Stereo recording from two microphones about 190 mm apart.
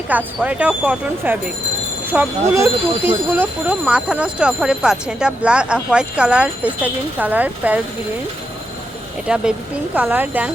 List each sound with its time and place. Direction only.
0.1 s speech: 5° right (ahead or behind)
9.2 s speech: 5° right (ahead or behind)